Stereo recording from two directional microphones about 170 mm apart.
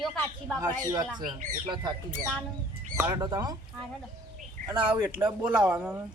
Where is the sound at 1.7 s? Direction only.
25° right (ahead or behind).